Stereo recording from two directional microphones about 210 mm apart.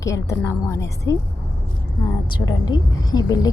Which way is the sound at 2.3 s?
20° left (ahead or behind).